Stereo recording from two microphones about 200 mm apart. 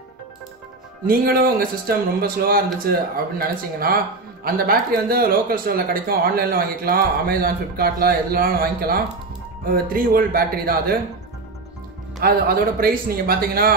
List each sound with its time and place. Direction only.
1.0 s speech: 45° right (ahead or behind)
12.2 s speech: 50° right (ahead or behind)